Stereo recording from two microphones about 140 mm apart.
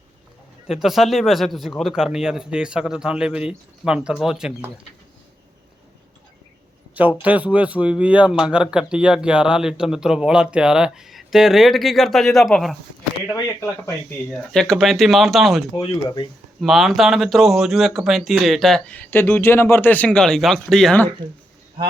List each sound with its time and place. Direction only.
0.7 s speech: centre (ahead or behind)
6.9 s speech: 10° right (ahead or behind)
13.2 s speech: 20° left (ahead or behind)
14.5 s speech: 5° left (ahead or behind)
15.7 s speech: 35° left (ahead or behind)
16.6 s speech: centre (ahead or behind)